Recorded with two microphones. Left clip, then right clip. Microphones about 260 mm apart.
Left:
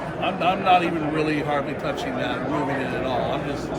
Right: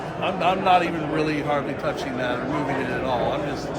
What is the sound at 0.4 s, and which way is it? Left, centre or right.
Speech, centre.